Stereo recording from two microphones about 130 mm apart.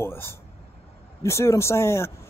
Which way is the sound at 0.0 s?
20° left (ahead or behind).